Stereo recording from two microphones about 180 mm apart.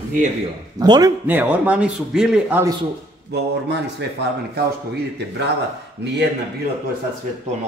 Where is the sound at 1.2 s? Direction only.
10° right (ahead or behind).